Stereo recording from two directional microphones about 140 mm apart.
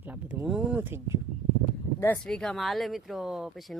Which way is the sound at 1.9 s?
20° left (ahead or behind).